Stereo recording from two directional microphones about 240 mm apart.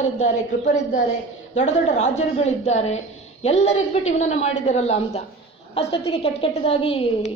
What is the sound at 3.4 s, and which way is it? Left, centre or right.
A woman's voice, left.